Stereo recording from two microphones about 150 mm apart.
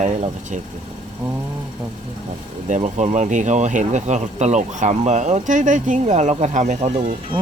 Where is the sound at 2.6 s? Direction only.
55° right (ahead or behind).